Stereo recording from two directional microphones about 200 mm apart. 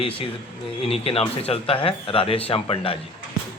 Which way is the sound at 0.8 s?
30° left (ahead or behind).